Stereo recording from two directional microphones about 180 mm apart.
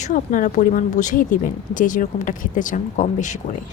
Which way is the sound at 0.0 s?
45° left (ahead or behind).